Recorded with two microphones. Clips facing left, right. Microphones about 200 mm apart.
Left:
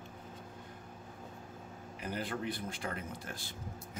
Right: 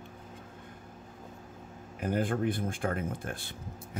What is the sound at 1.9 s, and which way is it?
Speech, 50° right (ahead or behind).